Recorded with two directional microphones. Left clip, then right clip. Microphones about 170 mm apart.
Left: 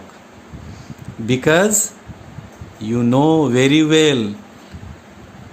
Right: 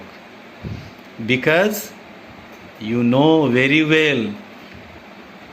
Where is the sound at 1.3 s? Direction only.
70° left (ahead or behind).